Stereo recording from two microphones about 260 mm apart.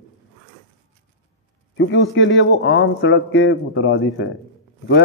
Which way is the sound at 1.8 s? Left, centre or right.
Left.